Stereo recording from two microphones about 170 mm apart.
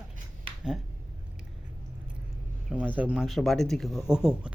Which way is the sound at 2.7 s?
10° right (ahead or behind).